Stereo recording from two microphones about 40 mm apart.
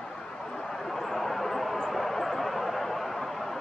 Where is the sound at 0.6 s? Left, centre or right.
Centre.